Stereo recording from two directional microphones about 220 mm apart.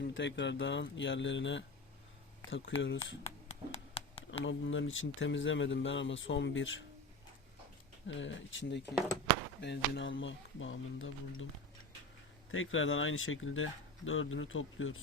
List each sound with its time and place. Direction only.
0.0 s speech: 55° left (ahead or behind)
3.2 s a sound: 30° left (ahead or behind)
4.3 s speech: 60° left (ahead or behind)
8.0 s speech: 60° left (ahead or behind)
12.5 s speech: 65° left (ahead or behind)